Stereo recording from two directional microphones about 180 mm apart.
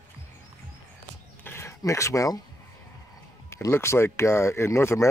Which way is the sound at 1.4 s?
15° left (ahead or behind).